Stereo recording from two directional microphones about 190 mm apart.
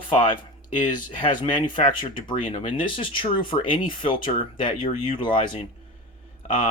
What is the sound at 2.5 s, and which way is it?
Speech, 30° left (ahead or behind).